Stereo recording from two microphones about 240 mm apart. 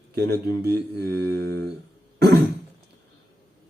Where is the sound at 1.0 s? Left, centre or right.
Right.